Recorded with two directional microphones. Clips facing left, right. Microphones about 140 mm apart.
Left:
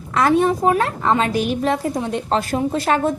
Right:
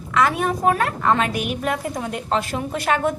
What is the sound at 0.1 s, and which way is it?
Speech, 35° left (ahead or behind).